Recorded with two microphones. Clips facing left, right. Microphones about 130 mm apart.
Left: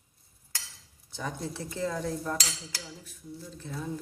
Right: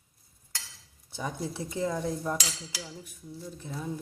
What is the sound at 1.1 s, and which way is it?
Speech, 15° right (ahead or behind).